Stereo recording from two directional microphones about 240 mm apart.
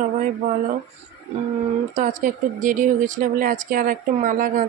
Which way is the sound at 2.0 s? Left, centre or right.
Right.